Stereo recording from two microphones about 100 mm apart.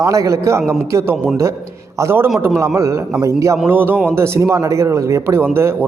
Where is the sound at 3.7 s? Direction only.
20° right (ahead or behind).